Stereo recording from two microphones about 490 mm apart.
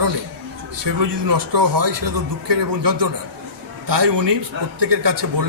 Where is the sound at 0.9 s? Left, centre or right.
Right.